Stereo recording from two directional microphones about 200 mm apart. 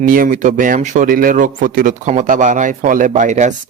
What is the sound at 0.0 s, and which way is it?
Speech, 45° right (ahead or behind).